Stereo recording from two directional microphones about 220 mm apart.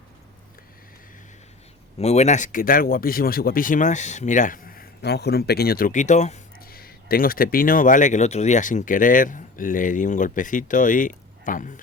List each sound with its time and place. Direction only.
2.0 s speech: 30° left (ahead or behind)